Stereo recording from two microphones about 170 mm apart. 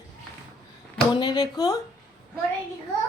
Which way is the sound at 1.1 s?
25° left (ahead or behind).